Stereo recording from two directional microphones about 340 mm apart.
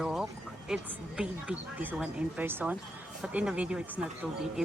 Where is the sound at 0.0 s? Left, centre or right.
Centre.